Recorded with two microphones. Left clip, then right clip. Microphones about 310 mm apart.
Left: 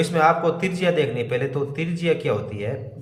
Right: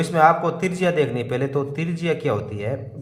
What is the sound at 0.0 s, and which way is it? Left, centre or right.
A man's voice, centre.